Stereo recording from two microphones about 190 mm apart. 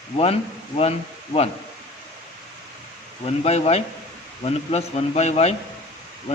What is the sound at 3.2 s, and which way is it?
Speech, 30° left (ahead or behind).